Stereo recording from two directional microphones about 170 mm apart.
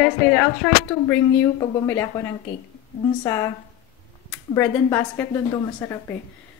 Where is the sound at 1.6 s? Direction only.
15° left (ahead or behind).